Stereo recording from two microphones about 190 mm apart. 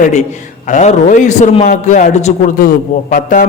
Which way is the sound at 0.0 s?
40° left (ahead or behind).